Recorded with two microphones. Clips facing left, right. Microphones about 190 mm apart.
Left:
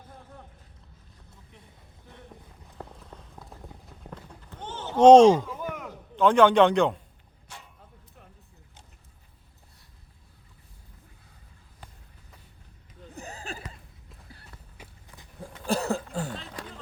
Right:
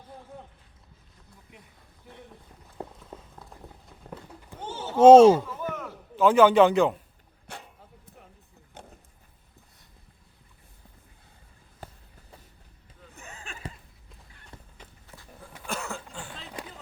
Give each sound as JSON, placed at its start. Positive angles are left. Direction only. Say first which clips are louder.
{"t": 3.0, "sound": "clip-clop", "louder": "right 2 dB", "side_deg": 0}
{"t": 5.5, "sound": "a sound", "louder": "right 1 dB", "side_deg": 10}
{"t": 6.1, "sound": "a man's voice", "louder": "right 1 dB", "side_deg": -5}
{"t": 7.5, "sound": "dog", "louder": "right 5 dB", "side_deg": -60}
{"t": 8.8, "sound": "vehicle", "louder": "right 12 dB", "side_deg": -55}
{"t": 13.1, "sound": "a sound", "louder": "left 6 dB", "side_deg": 35}
{"t": 14.8, "sound": "walk", "louder": "even", "side_deg": 15}
{"t": 15.6, "sound": "a sound", "louder": "left 8 dB", "side_deg": 35}
{"t": 16.3, "sound": "run", "louder": "left 2 dB", "side_deg": 0}